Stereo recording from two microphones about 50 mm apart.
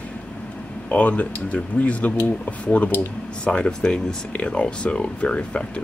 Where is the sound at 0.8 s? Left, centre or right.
Left.